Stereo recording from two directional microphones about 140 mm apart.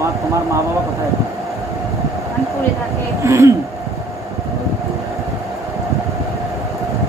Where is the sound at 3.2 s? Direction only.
20° right (ahead or behind).